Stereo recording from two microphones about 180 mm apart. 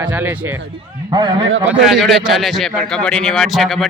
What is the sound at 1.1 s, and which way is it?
Speech, 25° right (ahead or behind).